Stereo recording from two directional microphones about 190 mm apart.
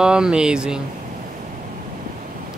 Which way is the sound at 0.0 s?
5° right (ahead or behind).